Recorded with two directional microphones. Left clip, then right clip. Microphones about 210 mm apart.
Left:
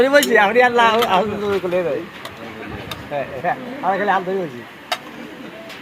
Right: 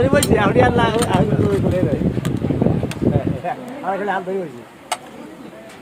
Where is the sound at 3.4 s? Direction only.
25° left (ahead or behind).